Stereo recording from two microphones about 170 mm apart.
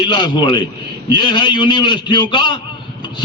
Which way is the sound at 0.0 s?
25° left (ahead or behind).